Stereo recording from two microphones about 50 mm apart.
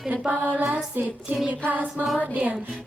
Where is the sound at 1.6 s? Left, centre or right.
Right.